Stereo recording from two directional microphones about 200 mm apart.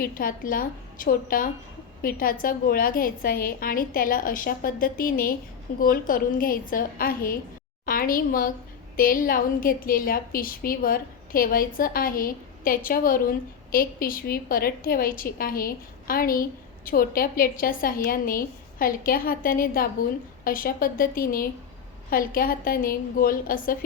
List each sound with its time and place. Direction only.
0.0 s a woman's voice: 45° left (ahead or behind)